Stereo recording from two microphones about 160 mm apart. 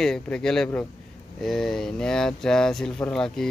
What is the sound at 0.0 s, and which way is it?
Speech, 5° left (ahead or behind).